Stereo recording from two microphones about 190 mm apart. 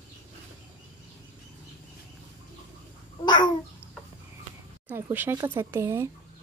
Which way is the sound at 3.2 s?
25° left (ahead or behind).